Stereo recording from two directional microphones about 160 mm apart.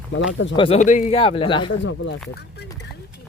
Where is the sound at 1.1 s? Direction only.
35° left (ahead or behind).